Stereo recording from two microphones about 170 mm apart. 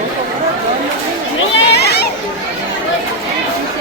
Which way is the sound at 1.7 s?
70° left (ahead or behind).